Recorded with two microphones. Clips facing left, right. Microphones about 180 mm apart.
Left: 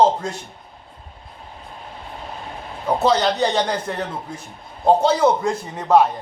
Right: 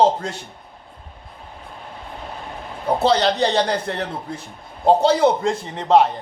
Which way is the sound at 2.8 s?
30° right (ahead or behind).